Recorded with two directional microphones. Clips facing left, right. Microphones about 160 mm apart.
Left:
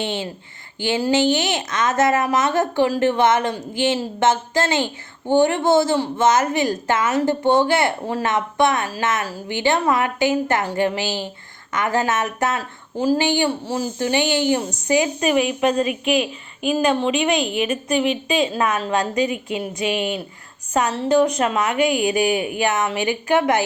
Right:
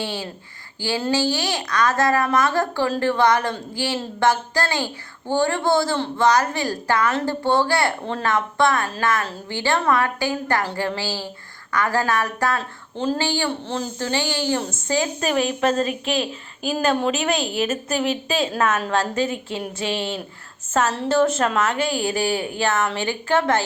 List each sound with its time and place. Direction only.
0.0 s a woman's voice: 20° left (ahead or behind)
15.3 s a woman's voice: 5° left (ahead or behind)
18.5 s a woman's voice: 10° left (ahead or behind)